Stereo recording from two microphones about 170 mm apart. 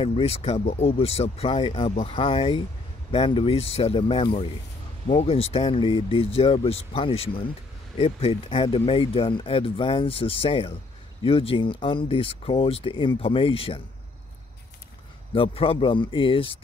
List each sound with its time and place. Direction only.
0.0 s speech: 35° left (ahead or behind)
15.3 s speech: 30° left (ahead or behind)